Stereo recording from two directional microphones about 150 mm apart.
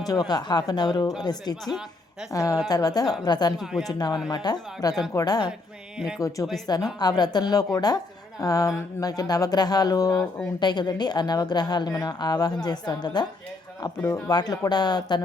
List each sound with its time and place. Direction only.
0.0 s a woman's voice: 25° left (ahead or behind)
3.6 s speech: 5° right (ahead or behind)
3.8 s a woman's voice: 25° left (ahead or behind)